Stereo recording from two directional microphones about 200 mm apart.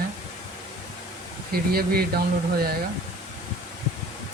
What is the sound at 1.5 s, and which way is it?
Speech, 50° right (ahead or behind).